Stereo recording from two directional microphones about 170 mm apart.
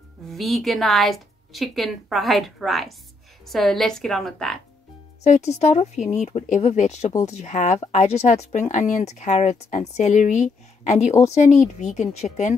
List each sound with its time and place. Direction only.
0.3 s a woman's voice: centre (ahead or behind)
5.2 s speech: 45° left (ahead or behind)